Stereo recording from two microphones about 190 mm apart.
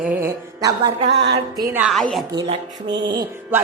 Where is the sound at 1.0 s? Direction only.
65° right (ahead or behind).